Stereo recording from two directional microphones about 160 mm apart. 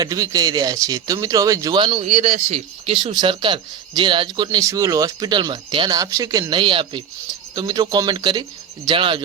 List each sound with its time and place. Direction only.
0.0 s speech: 25° right (ahead or behind)
2.0 s speech: 45° right (ahead or behind)